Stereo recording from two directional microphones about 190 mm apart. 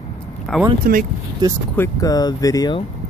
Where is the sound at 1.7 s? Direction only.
15° left (ahead or behind).